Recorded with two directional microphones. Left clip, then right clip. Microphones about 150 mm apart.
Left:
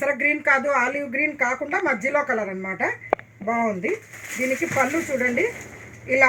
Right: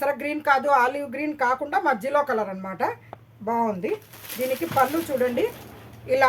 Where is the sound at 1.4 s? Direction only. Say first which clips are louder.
Even; 35° right (ahead or behind).